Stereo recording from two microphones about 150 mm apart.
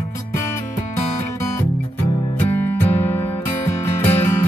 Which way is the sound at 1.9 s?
15° left (ahead or behind).